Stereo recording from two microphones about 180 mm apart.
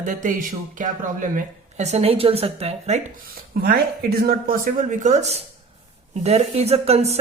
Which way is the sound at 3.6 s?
60° right (ahead or behind).